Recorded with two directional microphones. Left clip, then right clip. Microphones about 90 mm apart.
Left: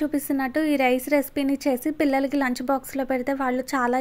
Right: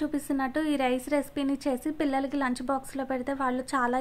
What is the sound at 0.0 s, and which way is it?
A woman's voice, 20° left (ahead or behind).